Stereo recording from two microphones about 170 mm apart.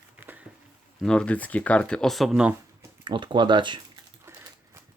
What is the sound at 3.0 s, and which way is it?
Speech, 30° right (ahead or behind).